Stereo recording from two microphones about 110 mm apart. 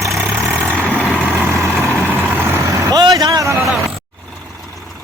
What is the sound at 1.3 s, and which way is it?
Vehicle, 20° right (ahead or behind).